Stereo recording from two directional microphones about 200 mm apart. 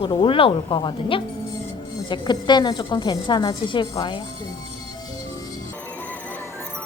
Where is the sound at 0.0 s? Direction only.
25° left (ahead or behind).